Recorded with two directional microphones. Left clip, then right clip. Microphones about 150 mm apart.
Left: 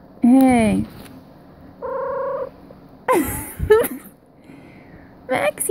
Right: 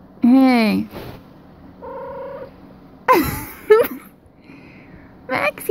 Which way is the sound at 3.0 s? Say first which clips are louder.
Right 4 dB; 15° left (ahead or behind).